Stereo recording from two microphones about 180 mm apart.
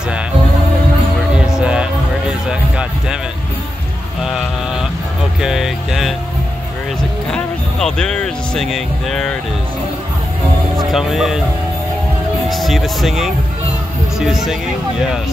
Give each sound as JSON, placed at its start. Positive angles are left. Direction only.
{"t": 1.3, "sound": "music", "side_deg": -5}
{"t": 4.2, "sound": "a sound", "side_deg": 0}
{"t": 5.4, "sound": "music", "side_deg": 0}
{"t": 7.3, "sound": "speech", "side_deg": 5}
{"t": 10.8, "sound": "speech", "side_deg": 0}
{"t": 12.4, "sound": "speech", "side_deg": 0}